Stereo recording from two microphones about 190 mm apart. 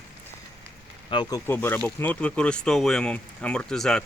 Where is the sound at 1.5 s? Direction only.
10° left (ahead or behind).